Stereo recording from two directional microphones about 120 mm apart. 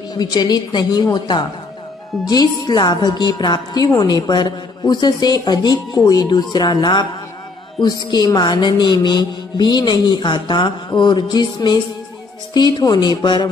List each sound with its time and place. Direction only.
0.1 s a woman's voice: 35° left (ahead or behind)